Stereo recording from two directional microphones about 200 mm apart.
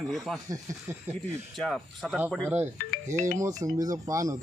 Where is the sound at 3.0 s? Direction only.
35° right (ahead or behind).